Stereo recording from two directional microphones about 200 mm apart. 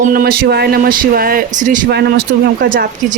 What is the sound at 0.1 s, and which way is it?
Speech, 45° right (ahead or behind).